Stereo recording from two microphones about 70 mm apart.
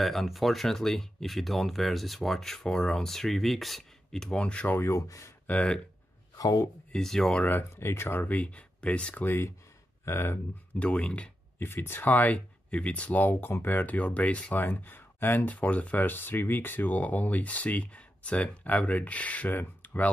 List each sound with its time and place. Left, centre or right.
0.0 s speech: centre
4.7 s speech: left
5.5 s speech: centre
6.3 s speech: left
6.9 s speech: centre
7.7 s speech: left
10.7 s speech: centre
11.6 s speech: left